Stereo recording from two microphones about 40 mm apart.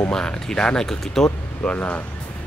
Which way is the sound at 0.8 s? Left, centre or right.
Centre.